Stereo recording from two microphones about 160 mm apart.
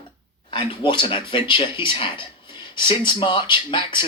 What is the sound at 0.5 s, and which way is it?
Speech, 30° left (ahead or behind).